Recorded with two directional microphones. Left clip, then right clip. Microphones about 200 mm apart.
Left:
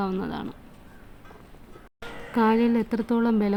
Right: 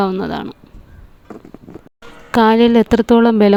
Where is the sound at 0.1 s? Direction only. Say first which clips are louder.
Right 10 dB; 35° right (ahead or behind).